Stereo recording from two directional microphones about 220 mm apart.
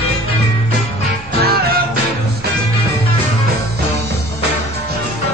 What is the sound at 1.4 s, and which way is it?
Music, 45° right (ahead or behind).